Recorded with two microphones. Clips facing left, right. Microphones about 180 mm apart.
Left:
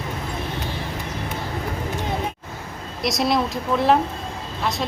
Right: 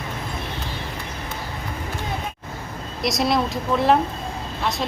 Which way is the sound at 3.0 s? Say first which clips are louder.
Even; centre (ahead or behind).